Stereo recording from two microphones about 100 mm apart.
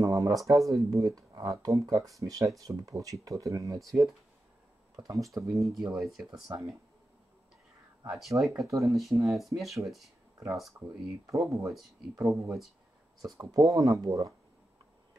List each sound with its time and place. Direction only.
0.0 s speech: 35° right (ahead or behind)
5.0 s speech: 35° right (ahead or behind)
5.6 s speech: centre (ahead or behind)
6.4 s speech: 35° right (ahead or behind)
8.1 s speech: centre (ahead or behind)
8.6 s speech: 30° right (ahead or behind)
9.2 s speech: centre (ahead or behind)
10.3 s speech: 35° right (ahead or behind)